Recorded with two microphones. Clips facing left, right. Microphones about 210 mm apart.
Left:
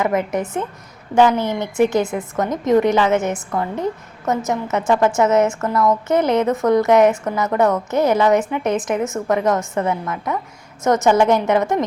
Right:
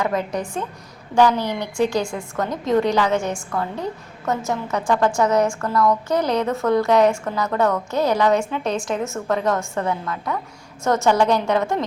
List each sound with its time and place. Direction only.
0.0 s a woman's voice: 20° left (ahead or behind)